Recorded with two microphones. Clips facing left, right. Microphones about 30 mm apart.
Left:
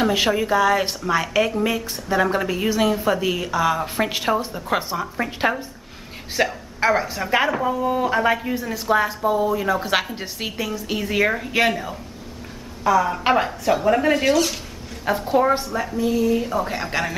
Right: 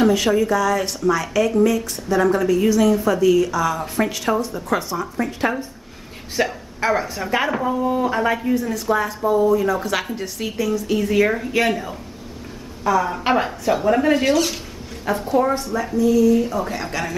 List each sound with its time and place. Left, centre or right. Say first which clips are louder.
0.1 s speech: right 2 dB; left
6.3 s a woman's voice: even; centre
15.2 s a woman's voice: left 1 dB; left
16.0 s speech: right 5 dB; left
16.4 s a woman's voice: even; centre